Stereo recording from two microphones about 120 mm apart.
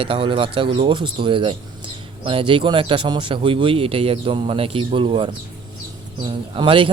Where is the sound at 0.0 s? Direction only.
45° right (ahead or behind).